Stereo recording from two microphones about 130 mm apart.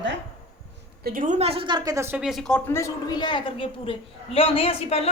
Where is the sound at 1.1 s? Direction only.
90° right.